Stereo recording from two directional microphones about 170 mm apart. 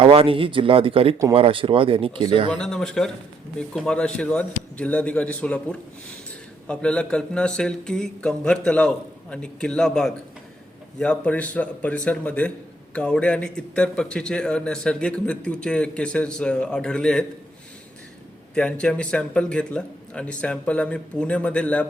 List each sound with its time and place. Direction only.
0.0 s speech: 35° right (ahead or behind)
2.5 s speech: 5° left (ahead or behind)
18.5 s speech: 5° left (ahead or behind)